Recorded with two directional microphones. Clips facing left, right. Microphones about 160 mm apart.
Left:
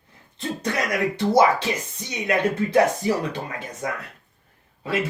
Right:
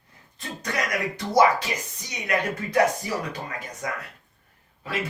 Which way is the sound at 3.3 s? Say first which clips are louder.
Left 3 dB; 25° left (ahead or behind).